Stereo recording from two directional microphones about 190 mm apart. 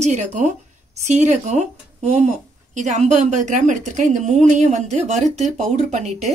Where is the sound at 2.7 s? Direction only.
40° right (ahead or behind).